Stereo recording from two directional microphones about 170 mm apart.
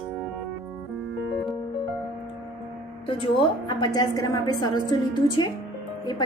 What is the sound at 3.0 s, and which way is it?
A woman's voice, 30° left (ahead or behind).